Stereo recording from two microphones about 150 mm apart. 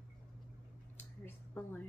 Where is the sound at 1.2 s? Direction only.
15° left (ahead or behind).